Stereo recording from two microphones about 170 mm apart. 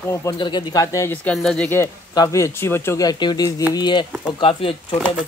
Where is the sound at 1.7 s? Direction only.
15° left (ahead or behind).